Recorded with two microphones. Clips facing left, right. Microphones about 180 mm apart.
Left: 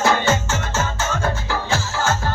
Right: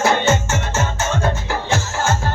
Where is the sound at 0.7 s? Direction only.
25° right (ahead or behind).